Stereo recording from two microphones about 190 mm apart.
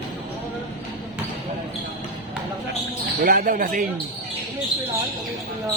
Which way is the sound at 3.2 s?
50° right (ahead or behind).